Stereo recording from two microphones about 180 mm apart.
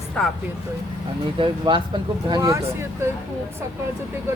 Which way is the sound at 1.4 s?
25° right (ahead or behind).